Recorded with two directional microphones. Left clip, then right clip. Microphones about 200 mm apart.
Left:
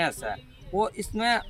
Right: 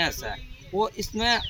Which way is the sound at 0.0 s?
15° left (ahead or behind).